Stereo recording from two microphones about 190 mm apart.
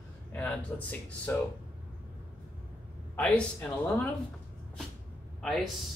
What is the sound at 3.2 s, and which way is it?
Speech, 5° left (ahead or behind).